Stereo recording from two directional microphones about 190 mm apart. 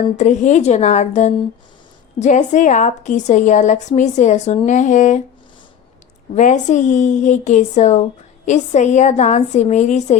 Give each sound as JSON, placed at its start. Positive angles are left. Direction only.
{"t": 0.2, "sound": "a woman's voice", "side_deg": 40}
{"t": 6.3, "sound": "a woman's voice", "side_deg": 40}